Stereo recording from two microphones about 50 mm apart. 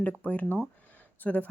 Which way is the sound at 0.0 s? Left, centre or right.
Left.